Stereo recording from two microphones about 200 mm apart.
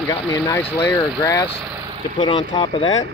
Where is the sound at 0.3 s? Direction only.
15° left (ahead or behind).